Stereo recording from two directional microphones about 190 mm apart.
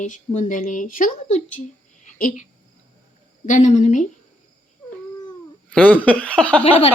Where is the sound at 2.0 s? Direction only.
40° left (ahead or behind).